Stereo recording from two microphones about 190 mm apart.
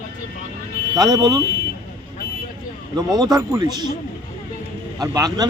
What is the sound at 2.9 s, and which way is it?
Speech, 20° right (ahead or behind).